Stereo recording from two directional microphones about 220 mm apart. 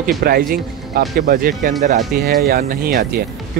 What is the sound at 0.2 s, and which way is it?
Speech, 45° right (ahead or behind).